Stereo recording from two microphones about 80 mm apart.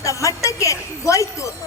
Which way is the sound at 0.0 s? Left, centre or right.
Left.